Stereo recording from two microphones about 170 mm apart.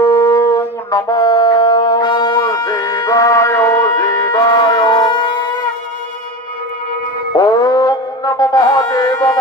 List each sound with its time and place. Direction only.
0.0 s shofar: 15° left (ahead or behind)
7.3 s music: 20° left (ahead or behind)